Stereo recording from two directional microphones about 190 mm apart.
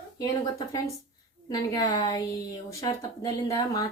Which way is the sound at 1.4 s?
20° left (ahead or behind).